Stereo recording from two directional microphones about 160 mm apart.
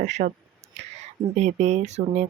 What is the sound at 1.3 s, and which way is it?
Speech, 45° right (ahead or behind).